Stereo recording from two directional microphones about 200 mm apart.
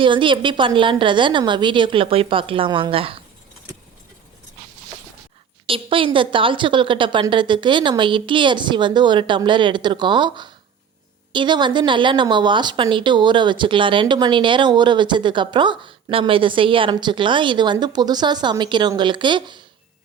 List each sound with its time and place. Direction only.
0.0 s a woman's voice: 25° right (ahead or behind)
5.6 s a woman's voice: 25° right (ahead or behind)